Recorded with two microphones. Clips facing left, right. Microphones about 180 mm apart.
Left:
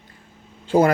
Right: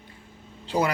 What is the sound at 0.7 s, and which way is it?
Speech, 50° left (ahead or behind).